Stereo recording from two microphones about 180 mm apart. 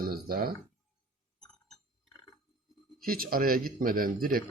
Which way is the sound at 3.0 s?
55° right (ahead or behind).